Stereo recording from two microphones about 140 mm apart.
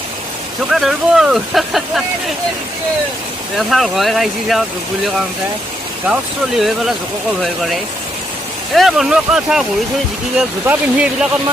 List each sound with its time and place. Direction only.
0.7 s speech: centre (ahead or behind)
3.6 s speech: centre (ahead or behind)
6.6 s speech: centre (ahead or behind)